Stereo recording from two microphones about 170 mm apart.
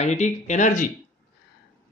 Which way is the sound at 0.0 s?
40° left (ahead or behind).